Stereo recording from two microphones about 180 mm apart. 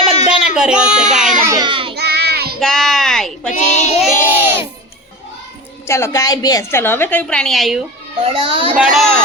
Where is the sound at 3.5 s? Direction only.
40° left (ahead or behind).